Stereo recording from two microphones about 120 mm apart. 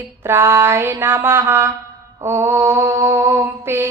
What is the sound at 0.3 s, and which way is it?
Mantra, 20° right (ahead or behind).